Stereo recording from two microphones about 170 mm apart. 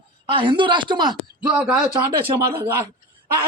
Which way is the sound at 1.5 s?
5° right (ahead or behind).